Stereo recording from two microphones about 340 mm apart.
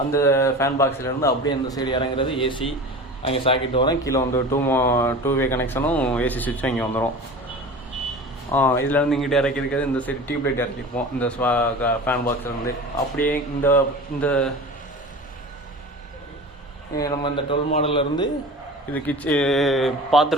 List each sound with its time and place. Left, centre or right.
0.1 s speech: centre
8.5 s a man's voice: centre
17.0 s speech: centre
18.9 s a man's voice: centre